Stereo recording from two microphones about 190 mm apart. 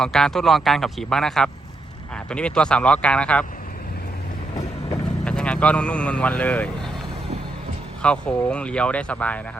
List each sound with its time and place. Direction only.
0.0 s speech: centre (ahead or behind)
5.2 s speech: 5° left (ahead or behind)
8.0 s speech: 5° left (ahead or behind)